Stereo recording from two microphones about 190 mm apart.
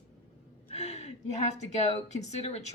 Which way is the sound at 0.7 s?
35° left (ahead or behind).